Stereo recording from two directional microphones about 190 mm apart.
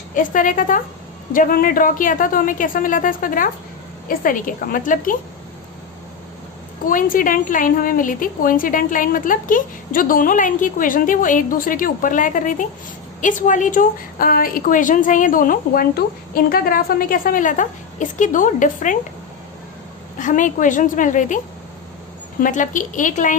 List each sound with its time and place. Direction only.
0.1 s a woman's voice: 45° left (ahead or behind)
6.8 s a woman's voice: 45° left (ahead or behind)
20.1 s a woman's voice: 40° left (ahead or behind)